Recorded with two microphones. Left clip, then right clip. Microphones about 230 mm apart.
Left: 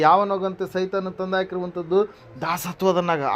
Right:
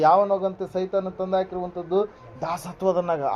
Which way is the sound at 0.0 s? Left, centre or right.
Left.